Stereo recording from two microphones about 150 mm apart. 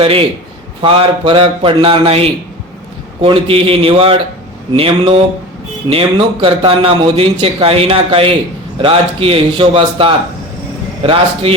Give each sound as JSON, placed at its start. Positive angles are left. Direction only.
{"t": 0.0, "sound": "a man's voice", "side_deg": -40}